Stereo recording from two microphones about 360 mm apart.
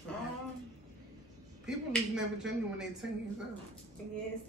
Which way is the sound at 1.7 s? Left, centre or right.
Centre.